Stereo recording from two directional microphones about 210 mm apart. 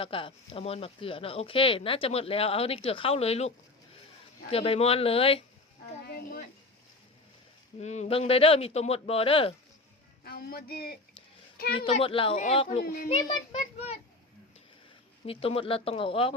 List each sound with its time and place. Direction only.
0.0 s speech: 25° left (ahead or behind)
4.5 s speech: 30° left (ahead or behind)
6.0 s a sound: 45° left (ahead or behind)
7.8 s speech: 30° left (ahead or behind)
10.2 s speech: 45° left (ahead or behind)
11.8 s speech: 30° left (ahead or behind)
15.3 s speech: 25° left (ahead or behind)